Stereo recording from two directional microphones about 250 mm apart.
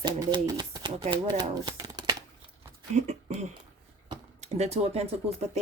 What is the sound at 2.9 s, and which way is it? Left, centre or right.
Speech, right.